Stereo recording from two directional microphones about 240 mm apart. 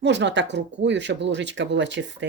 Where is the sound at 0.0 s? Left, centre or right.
Right.